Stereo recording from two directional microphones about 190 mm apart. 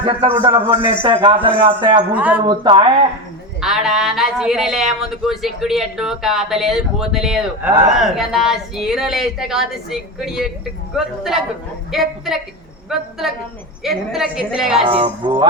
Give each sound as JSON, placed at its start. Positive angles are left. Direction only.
{"t": 0.0, "sound": "a man's voice", "side_deg": -25}
{"t": 2.1, "sound": "speech", "side_deg": -10}
{"t": 2.5, "sound": "a man's voice", "side_deg": -25}
{"t": 3.6, "sound": "speech", "side_deg": 0}
{"t": 14.8, "sound": "a man's voice", "side_deg": -30}